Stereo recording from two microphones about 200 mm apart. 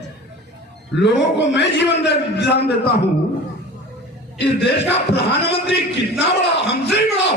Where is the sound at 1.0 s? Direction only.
60° left (ahead or behind).